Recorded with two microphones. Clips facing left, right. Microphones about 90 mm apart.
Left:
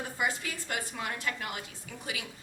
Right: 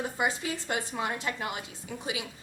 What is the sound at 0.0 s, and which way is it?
A woman's voice, 20° right (ahead or behind).